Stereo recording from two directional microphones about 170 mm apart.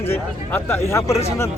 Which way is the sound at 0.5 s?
15° left (ahead or behind).